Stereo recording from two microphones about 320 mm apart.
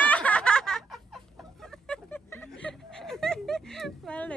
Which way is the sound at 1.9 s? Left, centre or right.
Centre.